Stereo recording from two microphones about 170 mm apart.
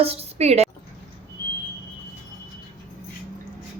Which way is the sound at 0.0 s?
35° right (ahead or behind).